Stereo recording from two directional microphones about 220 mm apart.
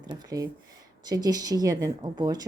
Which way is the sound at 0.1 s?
15° right (ahead or behind).